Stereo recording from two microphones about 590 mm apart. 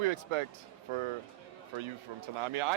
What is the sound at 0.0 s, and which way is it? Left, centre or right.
Speech, right.